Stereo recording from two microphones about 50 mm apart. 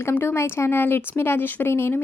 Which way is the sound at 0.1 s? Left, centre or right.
Left.